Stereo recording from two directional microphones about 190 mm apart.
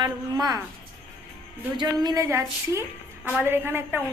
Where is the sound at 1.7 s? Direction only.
20° right (ahead or behind).